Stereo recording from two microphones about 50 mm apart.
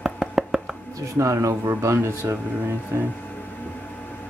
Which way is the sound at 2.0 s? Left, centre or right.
Right.